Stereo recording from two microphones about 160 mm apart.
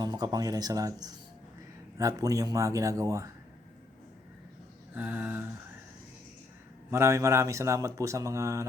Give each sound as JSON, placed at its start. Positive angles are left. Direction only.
{"t": 0.0, "sound": "a man's voice", "side_deg": -25}
{"t": 4.9, "sound": "a sound", "side_deg": -10}
{"t": 6.9, "sound": "a man's voice", "side_deg": -20}